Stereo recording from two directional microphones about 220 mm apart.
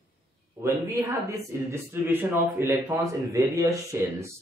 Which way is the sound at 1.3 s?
10° right (ahead or behind).